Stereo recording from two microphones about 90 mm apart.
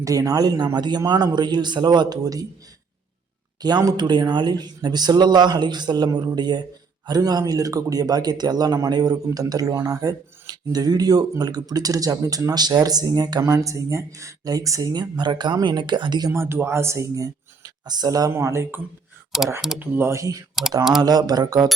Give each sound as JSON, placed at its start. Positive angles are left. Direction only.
{"t": 0.0, "sound": "speech", "side_deg": -40}
{"t": 3.6, "sound": "speech", "side_deg": -50}
{"t": 13.4, "sound": "speech", "side_deg": -35}
{"t": 15.0, "sound": "speech", "side_deg": -55}
{"t": 16.3, "sound": "speech", "side_deg": -25}
{"t": 18.3, "sound": "speech", "side_deg": -30}
{"t": 19.3, "sound": "speech", "side_deg": -5}
{"t": 19.8, "sound": "speech", "side_deg": -25}